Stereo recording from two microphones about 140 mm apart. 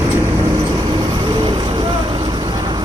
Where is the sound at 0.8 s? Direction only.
30° right (ahead or behind).